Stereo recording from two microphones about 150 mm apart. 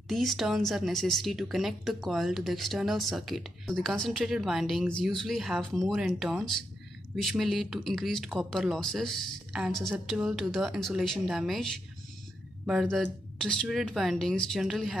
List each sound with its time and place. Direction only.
0.1 s speech: centre (ahead or behind)
12.8 s speech: 5° left (ahead or behind)